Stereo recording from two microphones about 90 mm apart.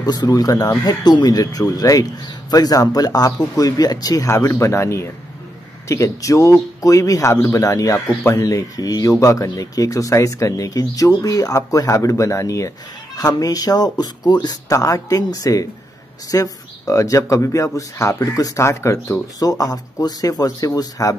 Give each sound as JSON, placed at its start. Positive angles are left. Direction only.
{"t": 0.0, "sound": "speech", "side_deg": 45}